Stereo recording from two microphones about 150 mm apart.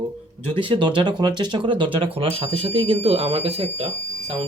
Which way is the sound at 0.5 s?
35° right (ahead or behind).